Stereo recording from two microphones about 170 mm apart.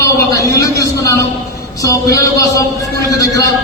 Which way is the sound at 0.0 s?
20° left (ahead or behind).